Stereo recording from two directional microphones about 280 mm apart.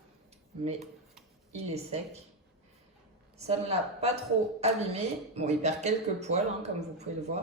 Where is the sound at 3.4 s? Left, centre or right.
Right.